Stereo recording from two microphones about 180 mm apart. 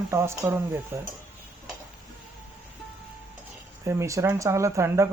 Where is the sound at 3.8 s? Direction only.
15° right (ahead or behind).